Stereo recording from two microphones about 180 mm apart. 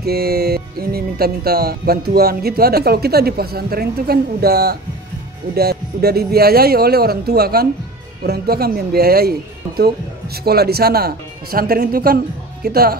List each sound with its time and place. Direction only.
0.0 s speech: 60° right (ahead or behind)